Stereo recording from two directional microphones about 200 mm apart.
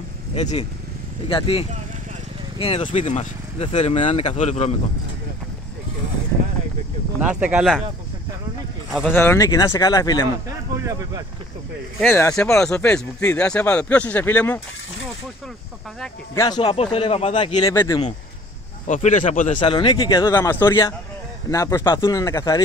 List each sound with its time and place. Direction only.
0.3 s speech: 35° left (ahead or behind)
7.2 s speech: 5° right (ahead or behind)
8.9 s speech: centre (ahead or behind)
9.2 s speech: 15° left (ahead or behind)
10.9 s speech: 20° right (ahead or behind)
12.0 s speech: 10° left (ahead or behind)
16.3 s speech: 20° left (ahead or behind)
18.9 s speech: 40° left (ahead or behind)
19.5 s speech: 25° left (ahead or behind)